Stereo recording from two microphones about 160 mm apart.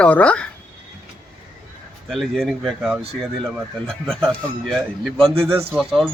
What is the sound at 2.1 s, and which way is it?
A man's voice, centre (ahead or behind).